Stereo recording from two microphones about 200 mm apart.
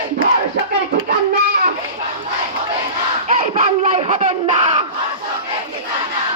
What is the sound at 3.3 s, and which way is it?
Battle cry, 40° right (ahead or behind).